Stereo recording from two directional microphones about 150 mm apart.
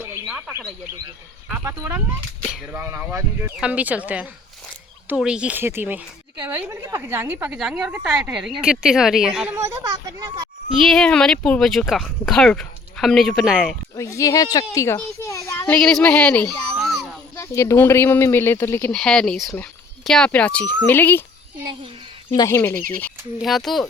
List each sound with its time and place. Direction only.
0.0 s a sound: 10° right (ahead or behind)
1.5 s a woman's voice: 15° right (ahead or behind)
9.6 s speech: 25° right (ahead or behind)
10.8 s speech: 5° left (ahead or behind)
13.9 s a child's voice: 20° left (ahead or behind)
16.7 s a sound: centre (ahead or behind)
17.3 s a child's voice: 20° left (ahead or behind)
22.4 s speech: 20° left (ahead or behind)
23.4 s speech: centre (ahead or behind)